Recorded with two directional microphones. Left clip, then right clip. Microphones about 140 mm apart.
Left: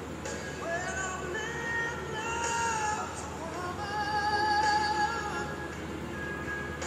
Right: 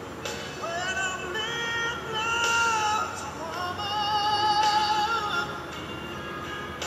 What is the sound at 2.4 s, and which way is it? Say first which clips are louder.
Baby cry: right 7 dB; 20° right (ahead or behind).